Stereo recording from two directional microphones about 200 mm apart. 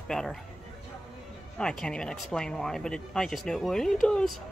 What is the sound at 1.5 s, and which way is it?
Speech, 5° left (ahead or behind).